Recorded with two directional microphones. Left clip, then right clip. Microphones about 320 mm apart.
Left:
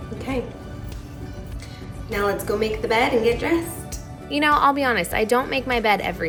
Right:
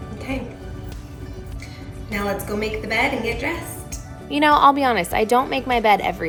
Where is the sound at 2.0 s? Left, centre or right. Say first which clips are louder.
Left 2 dB; centre.